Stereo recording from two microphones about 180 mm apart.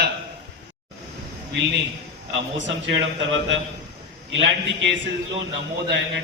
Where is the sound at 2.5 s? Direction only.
90° right.